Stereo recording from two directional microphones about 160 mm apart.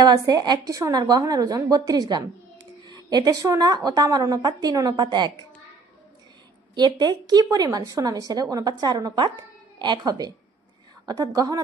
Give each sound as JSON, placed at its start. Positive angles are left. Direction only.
{"t": 0.0, "sound": "a woman's voice", "side_deg": -25}
{"t": 6.7, "sound": "a woman's voice", "side_deg": -25}